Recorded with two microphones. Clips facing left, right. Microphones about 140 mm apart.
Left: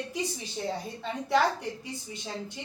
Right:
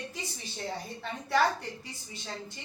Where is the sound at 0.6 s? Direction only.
20° left (ahead or behind).